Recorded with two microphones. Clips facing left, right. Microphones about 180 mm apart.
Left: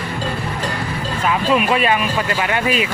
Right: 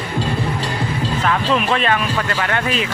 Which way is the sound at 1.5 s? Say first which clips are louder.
Left 4 dB; 10° left (ahead or behind).